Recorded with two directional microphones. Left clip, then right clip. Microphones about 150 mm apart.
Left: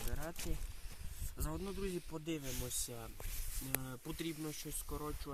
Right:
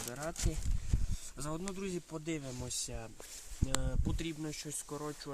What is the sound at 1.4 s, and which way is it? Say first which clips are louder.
Speech: right 3 dB; 20° right (ahead or behind).